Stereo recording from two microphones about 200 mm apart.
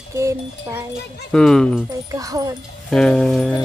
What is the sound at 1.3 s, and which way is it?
Music, 5° left (ahead or behind).